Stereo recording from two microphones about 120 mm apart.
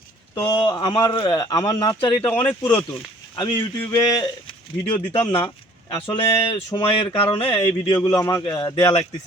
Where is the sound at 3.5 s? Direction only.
25° left (ahead or behind).